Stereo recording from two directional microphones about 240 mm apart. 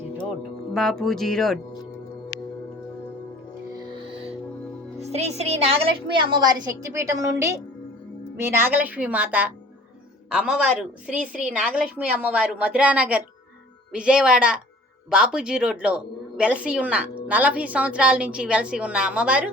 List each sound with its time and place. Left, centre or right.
0.7 s a woman's voice: centre
3.8 s music: centre
4.9 s a woman's voice: right; by 19.5 s centre